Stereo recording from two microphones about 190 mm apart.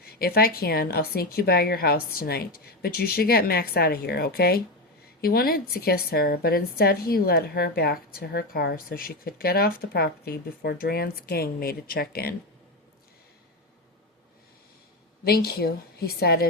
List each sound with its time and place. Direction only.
0.0 s a woman's voice: 55° left (ahead or behind)
15.2 s a woman's voice: 55° left (ahead or behind)